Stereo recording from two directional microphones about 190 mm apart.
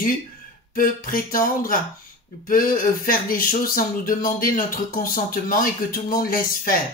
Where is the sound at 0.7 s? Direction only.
45° left (ahead or behind).